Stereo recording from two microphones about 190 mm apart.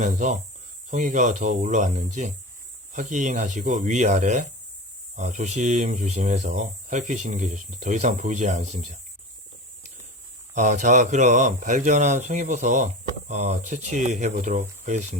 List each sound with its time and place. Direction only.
0.0 s speech: 40° right (ahead or behind)
10.5 s speech: 40° right (ahead or behind)